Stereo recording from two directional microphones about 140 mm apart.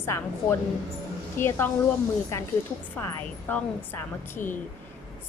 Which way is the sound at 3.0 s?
15° left (ahead or behind).